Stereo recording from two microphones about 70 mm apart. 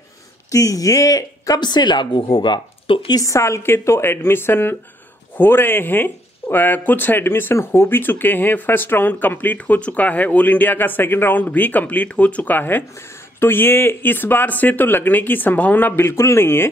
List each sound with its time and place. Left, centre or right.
0.5 s speech: left
3.1 s a woman's voice: left
16.1 s a woman's voice: left